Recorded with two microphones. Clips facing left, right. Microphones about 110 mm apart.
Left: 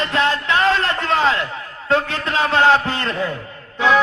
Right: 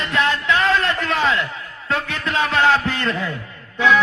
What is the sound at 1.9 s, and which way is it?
A man's voice, 30° left (ahead or behind).